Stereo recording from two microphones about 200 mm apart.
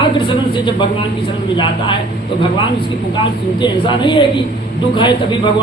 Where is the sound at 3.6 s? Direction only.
25° left (ahead or behind).